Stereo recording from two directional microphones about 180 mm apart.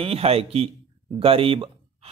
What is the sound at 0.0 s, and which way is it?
A man's voice, 35° right (ahead or behind).